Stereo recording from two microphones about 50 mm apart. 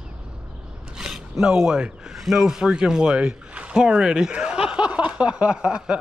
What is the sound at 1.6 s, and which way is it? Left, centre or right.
Snicker, centre.